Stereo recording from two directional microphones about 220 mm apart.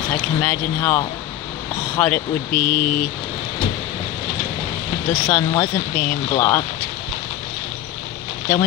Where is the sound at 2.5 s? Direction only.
40° left (ahead or behind).